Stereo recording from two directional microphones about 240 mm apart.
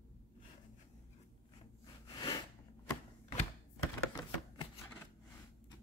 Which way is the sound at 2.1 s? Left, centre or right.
Centre.